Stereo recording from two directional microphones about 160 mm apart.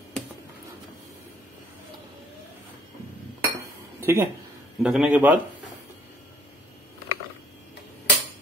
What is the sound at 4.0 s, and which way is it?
Speech, 15° right (ahead or behind).